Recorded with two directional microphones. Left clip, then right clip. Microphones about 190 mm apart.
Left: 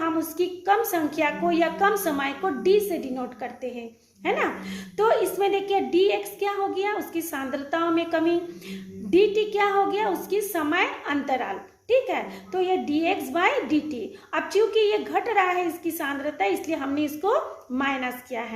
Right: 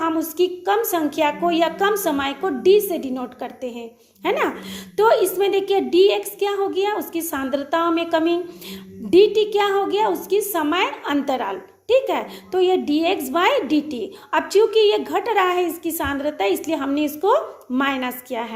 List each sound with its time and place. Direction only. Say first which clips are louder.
0.0 s a woman's voice: right 5 dB; 35° right (ahead or behind)